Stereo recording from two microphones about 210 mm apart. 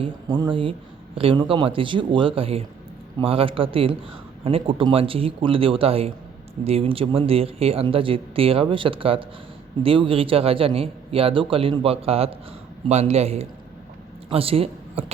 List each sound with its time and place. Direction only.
0.0 s a man's voice: 25° right (ahead or behind)